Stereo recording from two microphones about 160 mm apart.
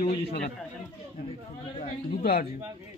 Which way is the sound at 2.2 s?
80° left.